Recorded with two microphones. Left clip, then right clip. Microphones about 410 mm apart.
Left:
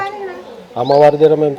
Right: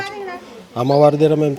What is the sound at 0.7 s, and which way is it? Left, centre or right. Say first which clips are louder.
Speech: left 4 dB; right.